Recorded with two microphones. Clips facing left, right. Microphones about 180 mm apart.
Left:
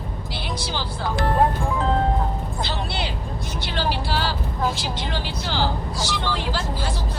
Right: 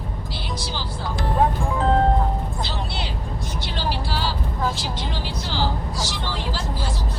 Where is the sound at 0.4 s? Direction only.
60° left (ahead or behind).